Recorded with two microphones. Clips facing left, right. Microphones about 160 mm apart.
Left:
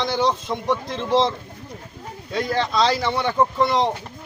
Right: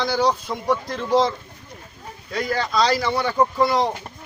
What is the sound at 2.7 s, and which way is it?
Speech, centre (ahead or behind).